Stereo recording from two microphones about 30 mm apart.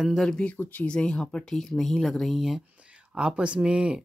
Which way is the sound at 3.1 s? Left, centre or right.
Right.